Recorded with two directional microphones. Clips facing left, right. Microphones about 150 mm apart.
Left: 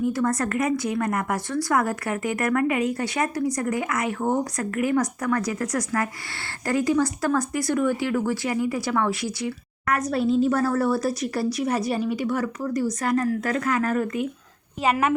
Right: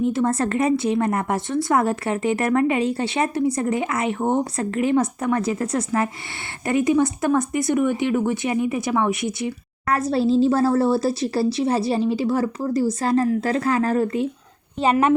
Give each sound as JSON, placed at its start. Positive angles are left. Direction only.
{"t": 0.0, "sound": "a woman's voice", "side_deg": -25}